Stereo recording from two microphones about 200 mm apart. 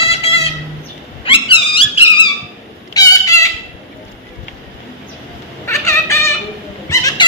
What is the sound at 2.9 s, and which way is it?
Cat, 15° left (ahead or behind).